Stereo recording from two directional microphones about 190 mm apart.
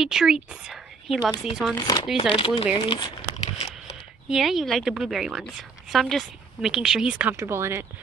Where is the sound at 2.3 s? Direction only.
25° left (ahead or behind).